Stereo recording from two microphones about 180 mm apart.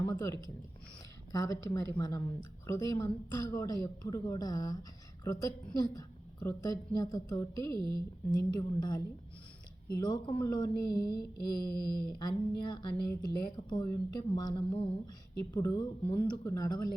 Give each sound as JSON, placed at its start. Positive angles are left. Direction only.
{"t": 0.1, "sound": "a woman's voice", "side_deg": 15}
{"t": 7.8, "sound": "speech", "side_deg": -25}
{"t": 8.4, "sound": "a woman's voice", "side_deg": 25}
{"t": 10.0, "sound": "a woman's voice", "side_deg": 25}
{"t": 11.0, "sound": "mantra", "side_deg": 60}
{"t": 12.2, "sound": "a woman's voice", "side_deg": 25}
{"t": 15.5, "sound": "a woman's voice", "side_deg": 20}